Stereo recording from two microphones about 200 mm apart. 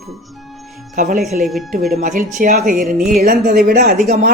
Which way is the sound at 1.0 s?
45° right (ahead or behind).